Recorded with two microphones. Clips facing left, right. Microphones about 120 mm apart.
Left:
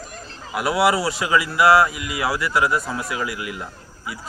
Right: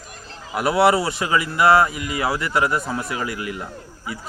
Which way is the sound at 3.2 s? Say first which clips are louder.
Right 1 dB; 40° right (ahead or behind).